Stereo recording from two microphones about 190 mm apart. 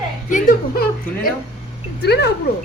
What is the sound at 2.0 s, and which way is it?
Speech, 60° left (ahead or behind).